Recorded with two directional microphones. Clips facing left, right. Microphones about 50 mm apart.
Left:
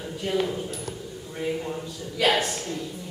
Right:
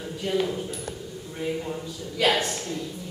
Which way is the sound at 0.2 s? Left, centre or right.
Centre.